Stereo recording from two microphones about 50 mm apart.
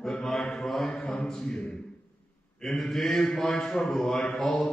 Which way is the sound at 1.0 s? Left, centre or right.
Centre.